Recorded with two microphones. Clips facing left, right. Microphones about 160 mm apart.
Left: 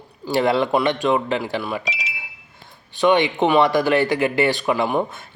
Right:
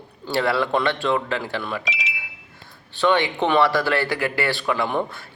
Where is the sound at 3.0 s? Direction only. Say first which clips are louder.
Left 3 dB; 15° left (ahead or behind).